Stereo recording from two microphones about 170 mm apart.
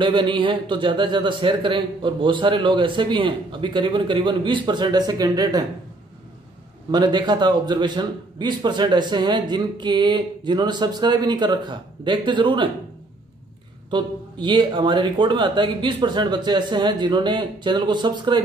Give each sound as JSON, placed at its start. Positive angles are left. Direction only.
{"t": 0.0, "sound": "a man's voice", "side_deg": -30}
{"t": 6.9, "sound": "a man's voice", "side_deg": -25}
{"t": 13.8, "sound": "a man's voice", "side_deg": -30}